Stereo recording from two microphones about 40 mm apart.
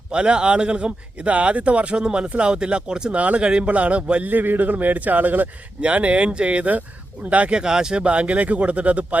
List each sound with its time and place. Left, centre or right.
0.1 s speech: right
3.2 s speech: right
3.4 s speech: right
3.7 s speech: right
4.2 s speech: right
5.8 s speech: right
7.5 s speech: centre
8.0 s speech: right